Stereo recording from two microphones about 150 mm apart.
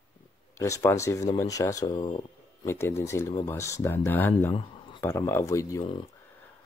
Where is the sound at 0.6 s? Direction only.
20° left (ahead or behind).